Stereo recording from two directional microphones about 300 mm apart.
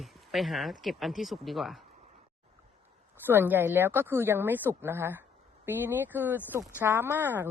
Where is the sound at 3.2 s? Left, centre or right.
Centre.